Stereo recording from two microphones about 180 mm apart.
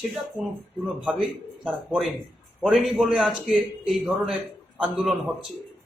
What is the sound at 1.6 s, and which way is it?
A man's voice, centre (ahead or behind).